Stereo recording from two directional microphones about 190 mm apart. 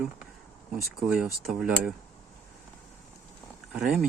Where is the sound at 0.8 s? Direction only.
5° right (ahead or behind).